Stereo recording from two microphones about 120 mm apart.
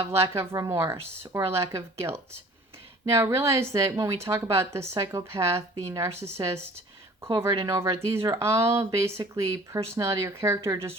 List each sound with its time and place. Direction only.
0.1 s speech: 25° right (ahead or behind)